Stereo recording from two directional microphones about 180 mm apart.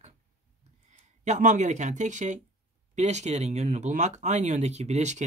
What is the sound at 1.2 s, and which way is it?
Speech, 40° right (ahead or behind).